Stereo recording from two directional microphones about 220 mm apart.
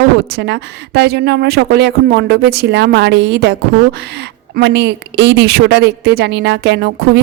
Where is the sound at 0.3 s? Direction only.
50° right (ahead or behind).